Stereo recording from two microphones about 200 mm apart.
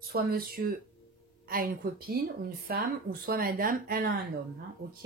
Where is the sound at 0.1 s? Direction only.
50° right (ahead or behind).